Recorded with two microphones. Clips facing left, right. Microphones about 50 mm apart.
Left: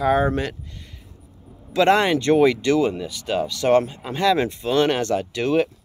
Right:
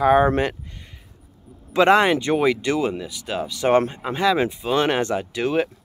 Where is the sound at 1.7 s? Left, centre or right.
Centre.